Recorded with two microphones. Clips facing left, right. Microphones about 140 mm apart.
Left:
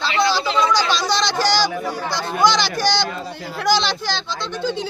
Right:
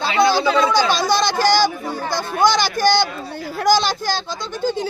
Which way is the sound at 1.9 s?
50° right (ahead or behind).